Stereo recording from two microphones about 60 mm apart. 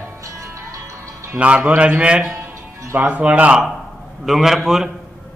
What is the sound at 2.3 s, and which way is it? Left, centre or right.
Music, right.